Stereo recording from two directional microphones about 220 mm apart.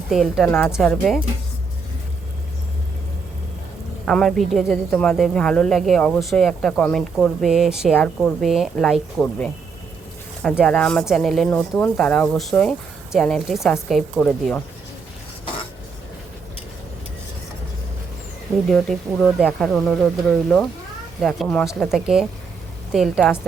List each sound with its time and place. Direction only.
0.1 s speech: centre (ahead or behind)
4.0 s speech: centre (ahead or behind)
18.7 s speech: centre (ahead or behind)
21.2 s speech: centre (ahead or behind)